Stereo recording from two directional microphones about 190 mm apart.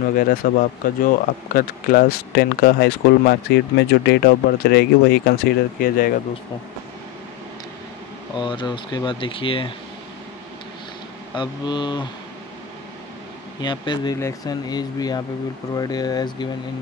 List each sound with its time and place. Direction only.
0.1 s speech: 50° left (ahead or behind)
8.4 s speech: 25° left (ahead or behind)
11.3 s speech: 25° left (ahead or behind)
13.6 s speech: 25° left (ahead or behind)